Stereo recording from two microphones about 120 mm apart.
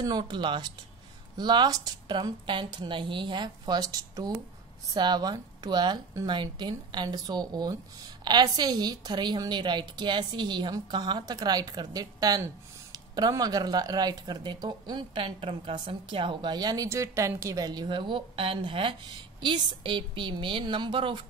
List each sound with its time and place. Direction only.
0.0 s a woman's voice: 35° right (ahead or behind)